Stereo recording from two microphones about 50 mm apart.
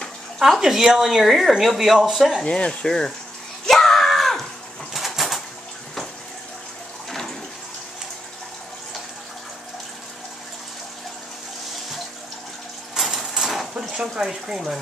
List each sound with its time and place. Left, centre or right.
0.4 s speech: centre
2.4 s speech: left
3.6 s screaming: centre
4.9 s bird: centre
7.1 s water: centre
12.9 s a sound: centre
13.9 s speech: centre